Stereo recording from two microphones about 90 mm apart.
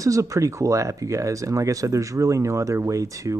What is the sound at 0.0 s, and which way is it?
Speech, 35° right (ahead or behind).